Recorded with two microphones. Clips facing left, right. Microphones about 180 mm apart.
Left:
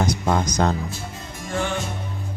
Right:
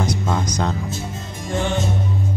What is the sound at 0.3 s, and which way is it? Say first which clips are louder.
Speech: left 2 dB; 50° left (ahead or behind).